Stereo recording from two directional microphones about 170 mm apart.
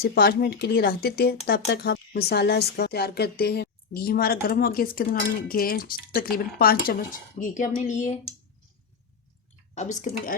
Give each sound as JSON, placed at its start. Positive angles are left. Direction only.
{"t": 0.0, "sound": "speech", "side_deg": 65}
{"t": 7.3, "sound": "speech", "side_deg": 50}
{"t": 9.7, "sound": "speech", "side_deg": 45}